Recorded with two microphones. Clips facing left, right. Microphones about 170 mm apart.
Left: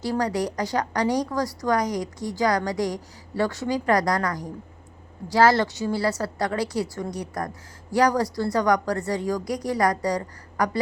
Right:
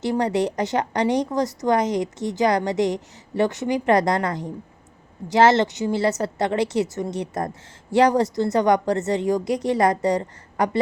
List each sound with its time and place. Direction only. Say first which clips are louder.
0.0 s a woman's voice: right 3 dB; 20° right (ahead or behind)